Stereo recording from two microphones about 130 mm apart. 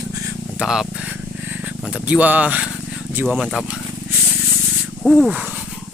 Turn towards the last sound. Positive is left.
turn(degrees=0)  # may be behind; listen again after turning